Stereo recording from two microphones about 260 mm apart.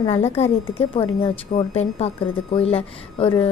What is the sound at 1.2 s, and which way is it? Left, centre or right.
A woman's voice, left.